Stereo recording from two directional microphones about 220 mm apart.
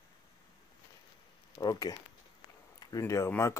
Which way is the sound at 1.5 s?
15° left (ahead or behind).